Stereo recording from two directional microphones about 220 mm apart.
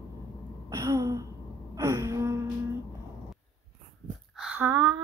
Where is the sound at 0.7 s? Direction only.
15° right (ahead or behind).